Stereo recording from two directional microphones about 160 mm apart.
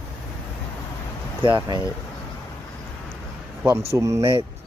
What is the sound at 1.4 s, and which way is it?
Speech, 30° right (ahead or behind).